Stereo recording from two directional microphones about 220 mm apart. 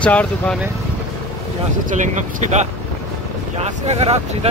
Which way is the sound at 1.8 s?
35° right (ahead or behind).